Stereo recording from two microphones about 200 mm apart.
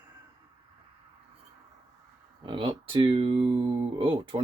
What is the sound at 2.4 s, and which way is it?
Speech, 25° right (ahead or behind).